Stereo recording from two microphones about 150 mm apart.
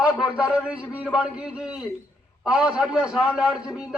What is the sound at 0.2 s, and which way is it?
A man's voice, 5° right (ahead or behind).